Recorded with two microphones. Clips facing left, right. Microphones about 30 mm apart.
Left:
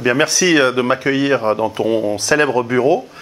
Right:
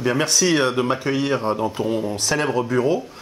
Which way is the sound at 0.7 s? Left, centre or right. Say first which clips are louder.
Left 5 dB; left.